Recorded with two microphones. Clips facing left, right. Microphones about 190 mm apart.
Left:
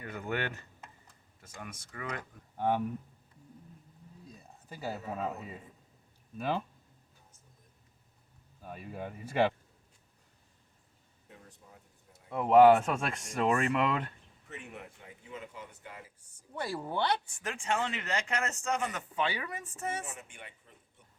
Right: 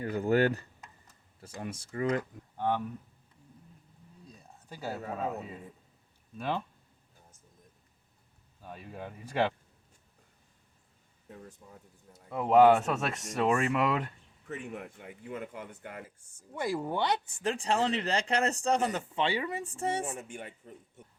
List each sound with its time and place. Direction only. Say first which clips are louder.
0.0 s speech: right 10 dB; 30° right (ahead or behind)
2.6 s speech: left 1 dB; 10° left (ahead or behind)
4.4 s a sound: right 2 dB; centre (ahead or behind)
6.3 s speech: even; 5° left (ahead or behind)
8.6 s speech: left 1 dB; 5° left (ahead or behind)
12.3 s speech: left 1 dB; centre (ahead or behind)
14.4 s speech: right 6 dB; 50° right (ahead or behind)
16.6 s speech: right 3 dB; 15° right (ahead or behind); by 20.1 s 30° right (ahead or behind)
20.1 s speech: right 8 dB; 40° right (ahead or behind)